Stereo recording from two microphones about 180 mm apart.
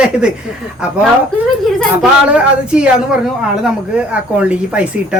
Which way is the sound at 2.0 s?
5° right (ahead or behind).